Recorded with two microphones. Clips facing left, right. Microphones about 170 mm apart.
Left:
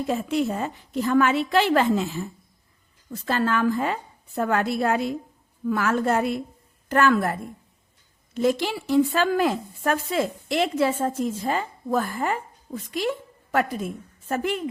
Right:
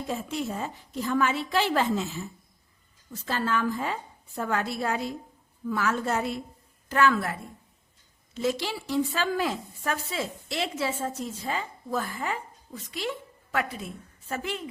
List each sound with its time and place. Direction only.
0.1 s a woman's voice: 70° left (ahead or behind); by 14.6 s 50° left (ahead or behind)